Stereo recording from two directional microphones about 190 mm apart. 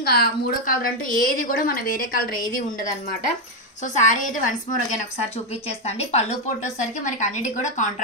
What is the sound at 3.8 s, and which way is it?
A woman's voice, 40° left (ahead or behind).